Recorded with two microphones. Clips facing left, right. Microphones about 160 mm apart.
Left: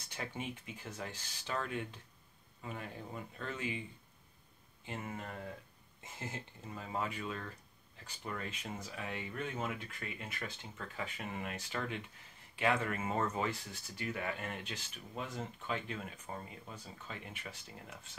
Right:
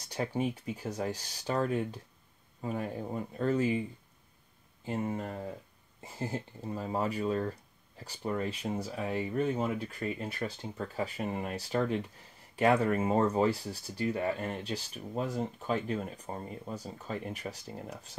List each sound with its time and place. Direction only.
0.0 s speech: 35° right (ahead or behind)
4.8 s speech: 35° right (ahead or behind)